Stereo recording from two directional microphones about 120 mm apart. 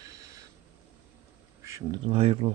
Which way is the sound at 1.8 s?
50° right (ahead or behind).